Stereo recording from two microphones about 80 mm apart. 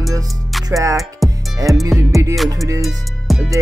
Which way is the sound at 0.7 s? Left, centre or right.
Right.